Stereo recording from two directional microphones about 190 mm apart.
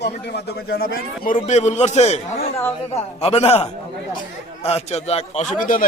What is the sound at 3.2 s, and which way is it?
Speech, 30° left (ahead or behind).